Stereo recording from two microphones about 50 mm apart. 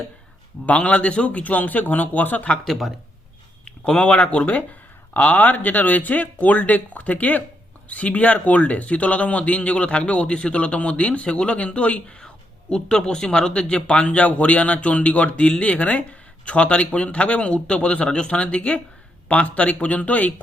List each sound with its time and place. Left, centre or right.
0.6 s speech: left
2.6 s speech: centre
3.7 s speech: centre